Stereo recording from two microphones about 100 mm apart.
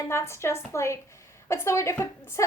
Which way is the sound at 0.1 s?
25° left (ahead or behind).